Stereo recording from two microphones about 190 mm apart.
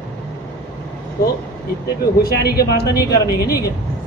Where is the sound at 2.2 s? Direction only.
55° left (ahead or behind).